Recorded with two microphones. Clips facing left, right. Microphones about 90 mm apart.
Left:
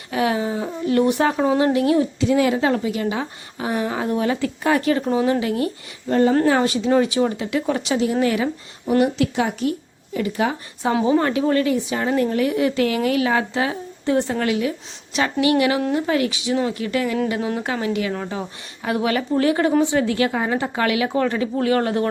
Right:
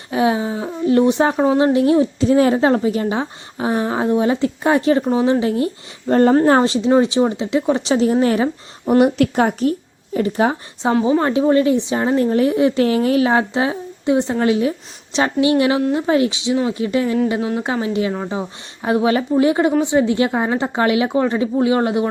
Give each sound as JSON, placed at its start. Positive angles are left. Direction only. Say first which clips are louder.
{"t": 0.1, "sound": "a woman's voice", "louder": "right 3 dB", "side_deg": -25}
{"t": 6.1, "sound": "speech", "louder": "right 4 dB", "side_deg": -50}
{"t": 6.6, "sound": "a woman's voice", "louder": "right 3 dB", "side_deg": -25}
{"t": 8.9, "sound": "a woman's voice", "louder": "right 4 dB", "side_deg": -55}